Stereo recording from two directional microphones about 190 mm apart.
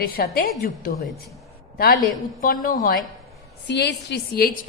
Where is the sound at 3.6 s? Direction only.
65° left (ahead or behind).